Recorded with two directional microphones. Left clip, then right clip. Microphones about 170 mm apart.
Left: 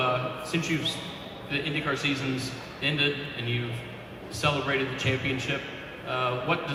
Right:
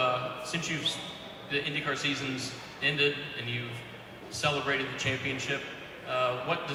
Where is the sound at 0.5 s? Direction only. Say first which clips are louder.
Left 3 dB; 35° right (ahead or behind).